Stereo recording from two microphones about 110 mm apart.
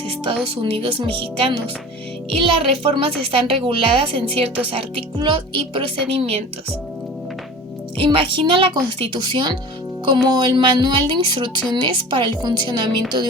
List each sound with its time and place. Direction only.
0.4 s a woman's voice: 55° right (ahead or behind)
7.9 s speech: 55° right (ahead or behind)